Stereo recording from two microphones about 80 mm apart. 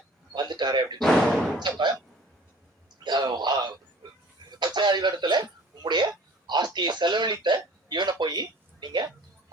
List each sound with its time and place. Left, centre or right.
0.3 s a sound: right
0.9 s speech: centre
1.5 s speech: right
3.0 s a sound: right
4.6 s music: right
5.8 s hiccup: right
6.7 s speech: right